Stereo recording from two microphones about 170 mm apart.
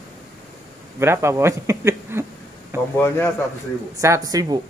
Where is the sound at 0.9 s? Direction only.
15° right (ahead or behind).